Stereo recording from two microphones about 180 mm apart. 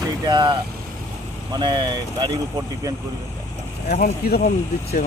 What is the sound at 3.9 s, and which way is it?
Speech, 55° left (ahead or behind).